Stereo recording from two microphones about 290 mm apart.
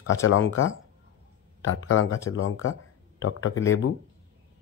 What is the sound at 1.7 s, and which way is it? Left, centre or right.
Speech, left.